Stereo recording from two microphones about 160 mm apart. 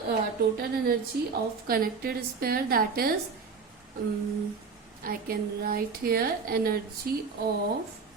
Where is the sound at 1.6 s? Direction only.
70° right (ahead or behind).